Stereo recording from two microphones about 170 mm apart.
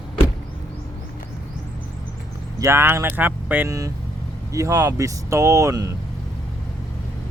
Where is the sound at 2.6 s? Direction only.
15° right (ahead or behind).